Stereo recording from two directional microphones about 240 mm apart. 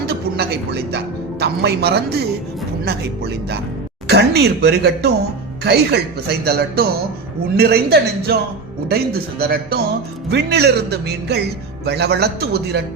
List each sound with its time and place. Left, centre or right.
0.0 s a woman's voice: right
4.0 s speech: right